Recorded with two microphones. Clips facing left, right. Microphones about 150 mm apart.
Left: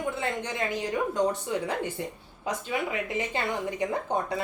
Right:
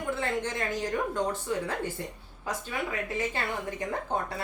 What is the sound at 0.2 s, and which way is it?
A woman's voice, 15° left (ahead or behind).